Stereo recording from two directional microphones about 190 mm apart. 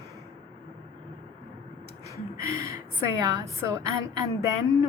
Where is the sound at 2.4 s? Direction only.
15° right (ahead or behind).